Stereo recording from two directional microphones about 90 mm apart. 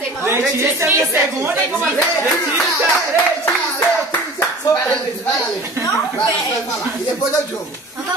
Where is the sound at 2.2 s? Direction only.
Centre (ahead or behind).